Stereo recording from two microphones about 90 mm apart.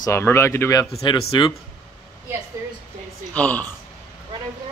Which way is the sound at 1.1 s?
60° left (ahead or behind).